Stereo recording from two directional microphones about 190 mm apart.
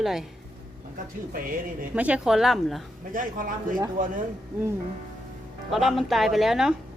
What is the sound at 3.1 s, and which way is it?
Speech, 45° right (ahead or behind).